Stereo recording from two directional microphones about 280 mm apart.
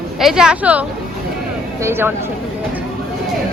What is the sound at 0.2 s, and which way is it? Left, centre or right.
Speech, centre.